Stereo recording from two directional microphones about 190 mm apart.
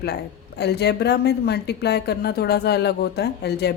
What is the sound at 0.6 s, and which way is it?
Speech, 60° left (ahead or behind).